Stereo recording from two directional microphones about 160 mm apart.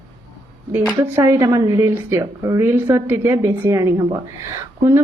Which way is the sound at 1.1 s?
15° right (ahead or behind).